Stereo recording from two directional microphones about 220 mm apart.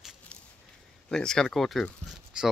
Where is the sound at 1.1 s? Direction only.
5° left (ahead or behind).